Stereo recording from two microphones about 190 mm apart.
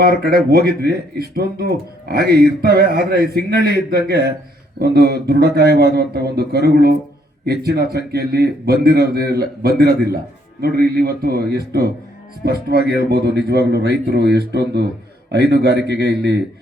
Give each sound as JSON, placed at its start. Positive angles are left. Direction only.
{"t": 0.0, "sound": "a man's voice", "side_deg": -55}